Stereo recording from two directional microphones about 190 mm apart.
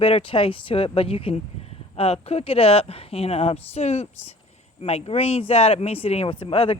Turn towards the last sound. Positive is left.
turn(degrees=30)  # may be behind; listen again after turning